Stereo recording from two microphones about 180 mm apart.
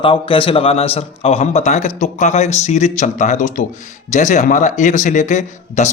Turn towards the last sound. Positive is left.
turn(degrees=40)  # may be behind; listen again after turning